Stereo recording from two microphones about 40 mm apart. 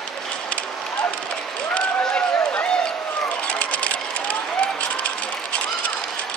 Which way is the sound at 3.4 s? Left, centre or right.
Left.